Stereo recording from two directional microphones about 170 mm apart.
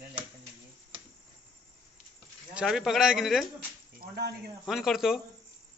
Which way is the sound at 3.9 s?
75° right (ahead or behind).